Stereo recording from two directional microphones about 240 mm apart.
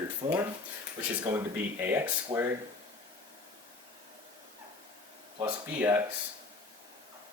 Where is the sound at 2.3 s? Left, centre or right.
Right.